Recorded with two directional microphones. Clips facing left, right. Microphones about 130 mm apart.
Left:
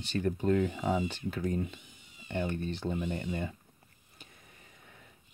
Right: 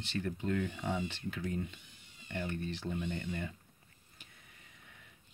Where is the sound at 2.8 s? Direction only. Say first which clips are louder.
Left 5 dB; 60° left (ahead or behind).